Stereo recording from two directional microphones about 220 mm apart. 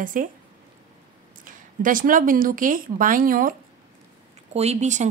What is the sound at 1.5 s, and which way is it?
Speech, 35° right (ahead or behind).